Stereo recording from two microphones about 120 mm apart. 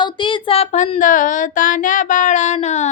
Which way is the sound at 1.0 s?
90° left.